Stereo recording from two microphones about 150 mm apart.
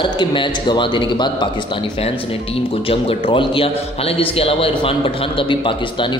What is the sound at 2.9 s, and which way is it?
A man's voice, 40° left (ahead or behind).